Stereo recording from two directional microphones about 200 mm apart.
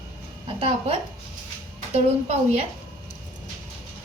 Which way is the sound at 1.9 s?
30° right (ahead or behind).